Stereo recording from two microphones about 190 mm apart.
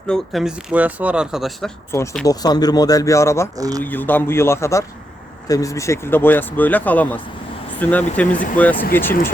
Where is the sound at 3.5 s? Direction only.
20° right (ahead or behind).